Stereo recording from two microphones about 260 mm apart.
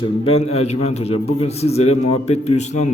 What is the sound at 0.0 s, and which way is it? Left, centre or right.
A man's voice, left.